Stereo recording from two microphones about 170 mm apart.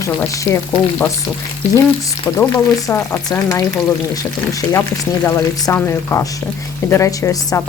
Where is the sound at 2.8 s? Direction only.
15° left (ahead or behind).